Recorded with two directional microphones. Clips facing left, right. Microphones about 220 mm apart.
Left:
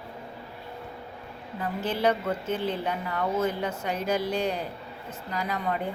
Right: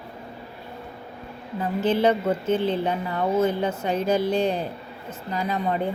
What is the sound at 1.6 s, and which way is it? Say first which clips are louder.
A woman's voice: right 5 dB; 25° right (ahead or behind).